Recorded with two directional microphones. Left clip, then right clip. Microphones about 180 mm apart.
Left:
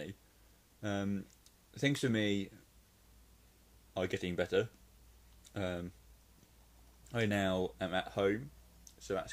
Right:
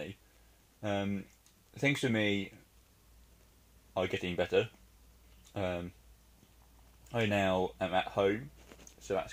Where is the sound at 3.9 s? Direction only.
5° left (ahead or behind).